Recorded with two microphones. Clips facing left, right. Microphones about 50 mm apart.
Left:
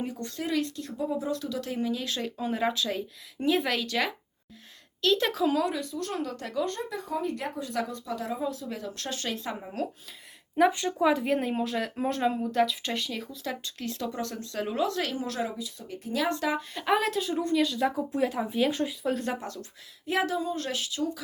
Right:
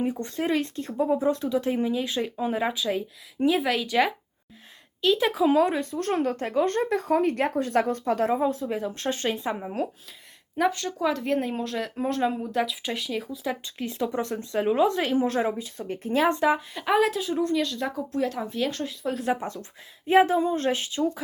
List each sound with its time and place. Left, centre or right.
0.0 s speech: right
5.5 s speech: right; by 9.9 s centre
10.7 s speech: centre; by 16.6 s right
16.6 s speech: centre
19.3 s speech: right